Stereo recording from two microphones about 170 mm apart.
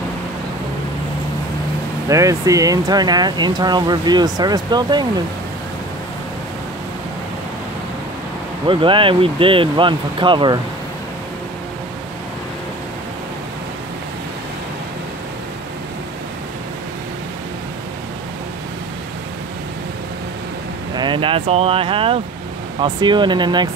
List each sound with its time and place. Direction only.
2.0 s speech: 20° right (ahead or behind)
8.6 s speech: 30° right (ahead or behind)
20.9 s speech: 25° right (ahead or behind)